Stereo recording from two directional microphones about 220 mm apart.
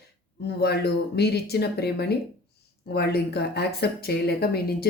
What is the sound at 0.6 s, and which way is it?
Speech, 45° left (ahead or behind).